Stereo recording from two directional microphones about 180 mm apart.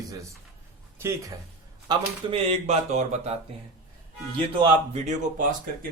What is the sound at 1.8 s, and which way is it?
Speech, 25° right (ahead or behind).